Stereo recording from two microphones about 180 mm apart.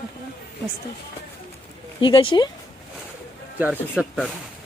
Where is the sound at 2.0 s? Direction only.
30° left (ahead or behind).